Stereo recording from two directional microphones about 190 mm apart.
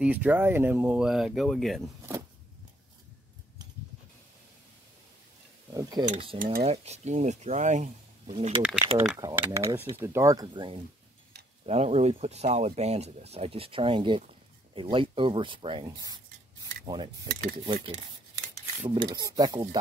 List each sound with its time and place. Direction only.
0.0 s speech: 10° right (ahead or behind)
5.8 s speech: 20° right (ahead or behind)
6.3 s cutlery: 45° right (ahead or behind)
6.6 s speech: 35° right (ahead or behind)
8.9 s speech: 5° right (ahead or behind)
9.2 s speech: 15° right (ahead or behind)